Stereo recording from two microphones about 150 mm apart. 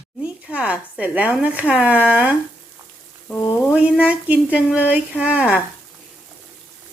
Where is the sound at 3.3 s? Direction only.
15° left (ahead or behind).